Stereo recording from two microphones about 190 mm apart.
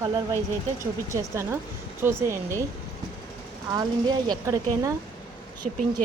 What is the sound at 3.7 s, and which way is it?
Speech, 20° right (ahead or behind).